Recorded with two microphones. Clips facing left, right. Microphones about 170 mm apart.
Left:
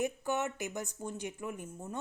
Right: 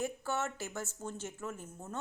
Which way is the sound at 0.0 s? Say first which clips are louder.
Left 3 dB; 15° left (ahead or behind).